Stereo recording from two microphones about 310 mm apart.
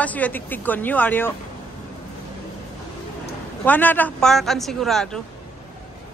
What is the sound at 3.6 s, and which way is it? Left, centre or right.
A man's voice, centre.